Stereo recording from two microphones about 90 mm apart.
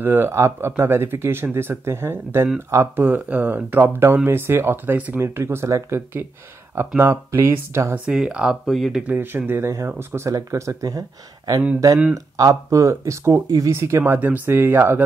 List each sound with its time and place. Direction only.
0.0 s speech: 25° right (ahead or behind)
8.1 s speech: 10° right (ahead or behind)
9.0 s speech: 20° right (ahead or behind); by 12.5 s 45° right (ahead or behind)
12.6 s speech: 35° right (ahead or behind)